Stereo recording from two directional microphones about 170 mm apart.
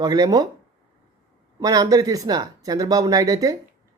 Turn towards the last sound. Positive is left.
turn(degrees=-20)  # may be behind; listen again after turning